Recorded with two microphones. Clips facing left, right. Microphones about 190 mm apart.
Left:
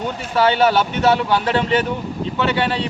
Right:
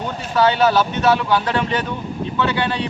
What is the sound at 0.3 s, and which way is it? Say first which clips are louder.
Speech: even; 30° left (ahead or behind).